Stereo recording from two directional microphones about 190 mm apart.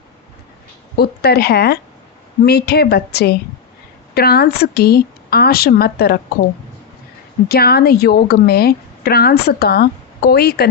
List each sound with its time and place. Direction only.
0.9 s a woman's voice: 55° left (ahead or behind)
7.4 s a woman's voice: 55° left (ahead or behind)